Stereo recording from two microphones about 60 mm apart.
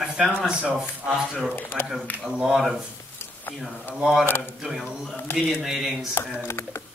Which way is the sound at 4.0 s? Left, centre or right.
Centre.